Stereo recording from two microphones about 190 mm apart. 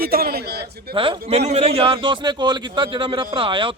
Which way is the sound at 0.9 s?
30° right (ahead or behind).